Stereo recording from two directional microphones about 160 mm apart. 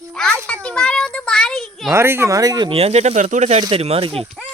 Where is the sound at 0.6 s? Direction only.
5° left (ahead or behind).